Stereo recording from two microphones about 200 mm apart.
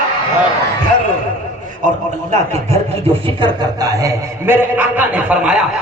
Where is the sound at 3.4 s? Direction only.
15° right (ahead or behind).